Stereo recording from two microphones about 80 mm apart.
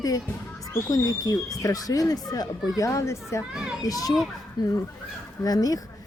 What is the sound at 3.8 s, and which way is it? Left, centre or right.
Speech, left.